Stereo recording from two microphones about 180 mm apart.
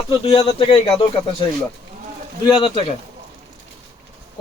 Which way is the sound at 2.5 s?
30° left (ahead or behind).